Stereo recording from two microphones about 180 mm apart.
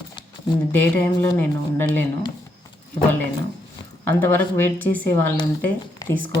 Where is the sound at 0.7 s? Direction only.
10° left (ahead or behind).